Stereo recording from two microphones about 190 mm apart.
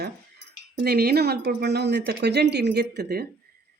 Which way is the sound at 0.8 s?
55° right (ahead or behind).